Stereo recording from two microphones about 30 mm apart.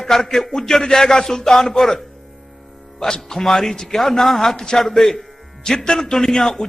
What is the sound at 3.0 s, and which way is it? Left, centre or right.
A man's voice, left.